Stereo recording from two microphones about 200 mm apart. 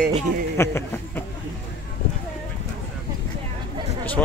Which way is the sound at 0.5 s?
10° left (ahead or behind).